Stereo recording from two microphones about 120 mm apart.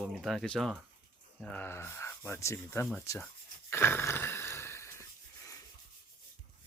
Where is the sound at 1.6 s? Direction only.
20° left (ahead or behind).